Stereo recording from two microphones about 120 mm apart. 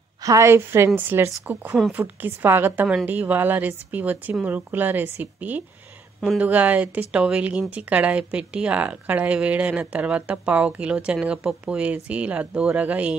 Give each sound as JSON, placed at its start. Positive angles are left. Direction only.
{"t": 0.2, "sound": "a woman's voice", "side_deg": -25}